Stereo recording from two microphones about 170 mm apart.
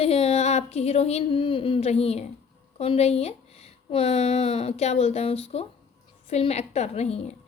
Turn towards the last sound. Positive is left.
turn(degrees=40)  # may be behind; listen again after turning